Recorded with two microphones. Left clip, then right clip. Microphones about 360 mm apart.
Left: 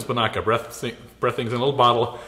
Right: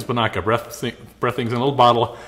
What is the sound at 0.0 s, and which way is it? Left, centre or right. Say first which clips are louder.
Speech: right 1 dB; right.